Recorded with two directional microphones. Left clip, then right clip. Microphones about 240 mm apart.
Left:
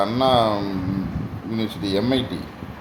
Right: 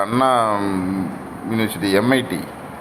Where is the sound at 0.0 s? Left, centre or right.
Centre.